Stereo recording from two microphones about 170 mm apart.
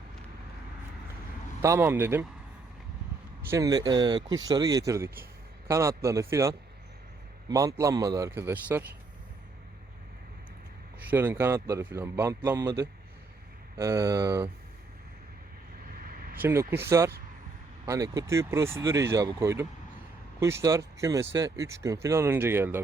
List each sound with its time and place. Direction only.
1.6 s a man's voice: 15° right (ahead or behind)
3.5 s a man's voice: 20° right (ahead or behind)
11.0 s a man's voice: 10° right (ahead or behind)
15.9 s a sound: 60° right (ahead or behind)
16.4 s a man's voice: 15° right (ahead or behind)